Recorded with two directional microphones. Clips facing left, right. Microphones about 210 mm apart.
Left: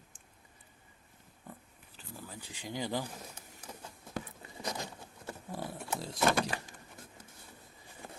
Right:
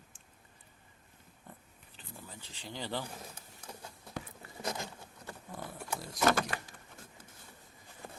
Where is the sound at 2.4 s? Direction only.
15° left (ahead or behind).